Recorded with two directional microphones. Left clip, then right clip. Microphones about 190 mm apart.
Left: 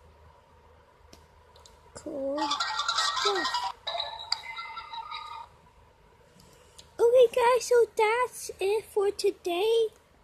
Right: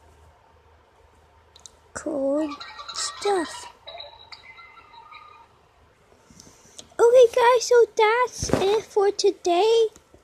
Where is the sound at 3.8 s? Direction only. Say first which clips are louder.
Left 6 dB; 40° left (ahead or behind).